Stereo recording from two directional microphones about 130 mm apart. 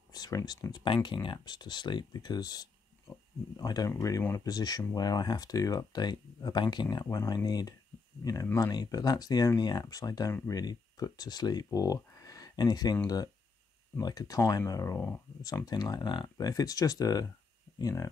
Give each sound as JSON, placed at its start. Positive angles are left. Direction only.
{"t": 0.1, "sound": "speech", "side_deg": 30}
{"t": 15.6, "sound": "speech", "side_deg": 30}